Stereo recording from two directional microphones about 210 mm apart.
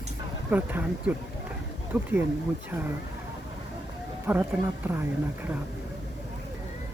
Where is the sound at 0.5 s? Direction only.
10° right (ahead or behind).